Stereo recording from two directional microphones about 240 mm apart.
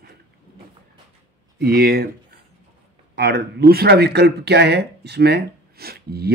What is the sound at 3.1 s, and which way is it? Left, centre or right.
Speech, right.